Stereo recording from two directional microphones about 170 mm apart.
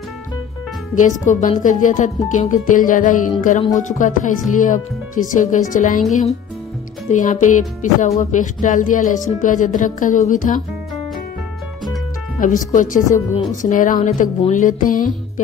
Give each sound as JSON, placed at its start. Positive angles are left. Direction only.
{"t": 0.9, "sound": "speech", "side_deg": 45}
{"t": 7.1, "sound": "speech", "side_deg": 45}
{"t": 12.4, "sound": "speech", "side_deg": 50}